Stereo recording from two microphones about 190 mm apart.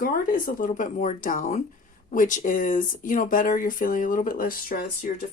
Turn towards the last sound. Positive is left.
turn(degrees=50)  # may be behind; listen again after turning